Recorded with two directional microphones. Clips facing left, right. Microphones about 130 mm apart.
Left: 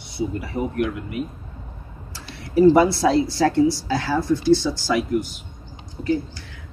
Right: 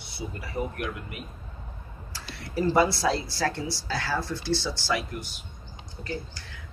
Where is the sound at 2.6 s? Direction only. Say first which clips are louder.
Left 8 dB; 20° left (ahead or behind).